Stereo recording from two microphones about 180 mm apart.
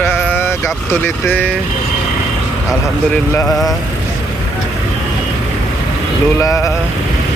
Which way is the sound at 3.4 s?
Centre (ahead or behind).